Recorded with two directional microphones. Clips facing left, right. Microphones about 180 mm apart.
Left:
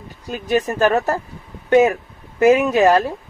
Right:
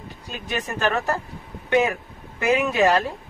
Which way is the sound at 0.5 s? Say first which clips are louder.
Left 8 dB; 40° left (ahead or behind).